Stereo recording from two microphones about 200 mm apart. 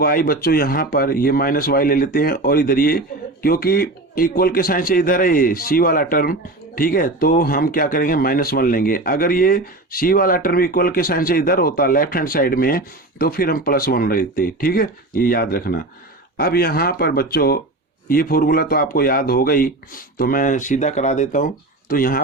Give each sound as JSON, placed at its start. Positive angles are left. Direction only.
{"t": 0.0, "sound": "speech", "side_deg": 50}